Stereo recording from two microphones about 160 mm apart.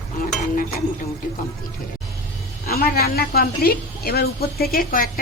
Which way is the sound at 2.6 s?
75° left (ahead or behind).